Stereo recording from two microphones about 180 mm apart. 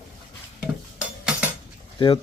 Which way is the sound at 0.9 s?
5° right (ahead or behind).